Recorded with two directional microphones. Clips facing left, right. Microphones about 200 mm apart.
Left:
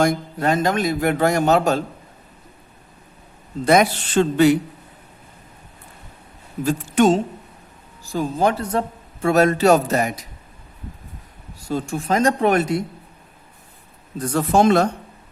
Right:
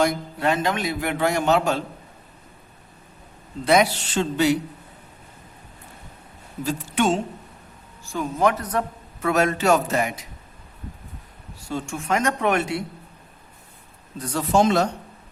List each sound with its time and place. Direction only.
0.0 s a man's voice: 45° left (ahead or behind)
3.6 s a man's voice: 50° left (ahead or behind)
6.7 s a man's voice: 40° left (ahead or behind)
11.7 s speech: 35° left (ahead or behind)
14.2 s a man's voice: 50° left (ahead or behind)